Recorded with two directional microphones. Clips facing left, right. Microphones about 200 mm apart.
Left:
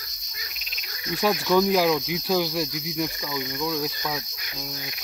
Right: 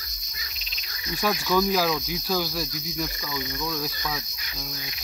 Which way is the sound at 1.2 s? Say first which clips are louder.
Left 3 dB; 20° left (ahead or behind).